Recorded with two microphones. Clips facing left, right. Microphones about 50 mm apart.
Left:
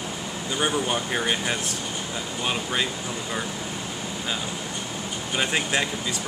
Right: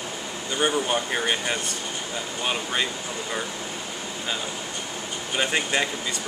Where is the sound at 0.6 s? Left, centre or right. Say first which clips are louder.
Right 2 dB; centre.